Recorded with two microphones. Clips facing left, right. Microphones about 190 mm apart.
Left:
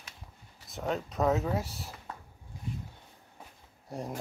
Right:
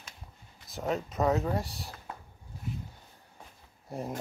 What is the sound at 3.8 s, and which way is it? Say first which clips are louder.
Speech: right 1 dB; centre (ahead or behind).